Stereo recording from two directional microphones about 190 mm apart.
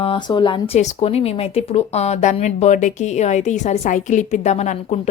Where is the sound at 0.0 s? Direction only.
25° left (ahead or behind).